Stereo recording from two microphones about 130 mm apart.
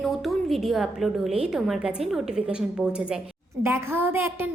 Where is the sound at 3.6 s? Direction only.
20° right (ahead or behind).